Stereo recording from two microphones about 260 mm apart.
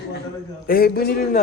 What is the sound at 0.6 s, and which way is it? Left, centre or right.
Speech, left.